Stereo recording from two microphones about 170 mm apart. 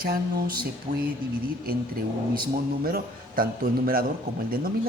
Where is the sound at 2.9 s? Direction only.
60° right (ahead or behind).